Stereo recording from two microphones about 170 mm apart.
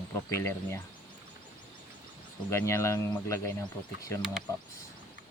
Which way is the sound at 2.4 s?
15° left (ahead or behind).